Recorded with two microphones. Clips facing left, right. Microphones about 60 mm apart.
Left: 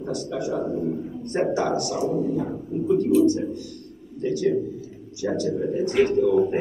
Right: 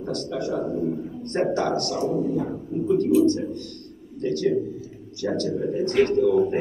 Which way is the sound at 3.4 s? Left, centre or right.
Centre.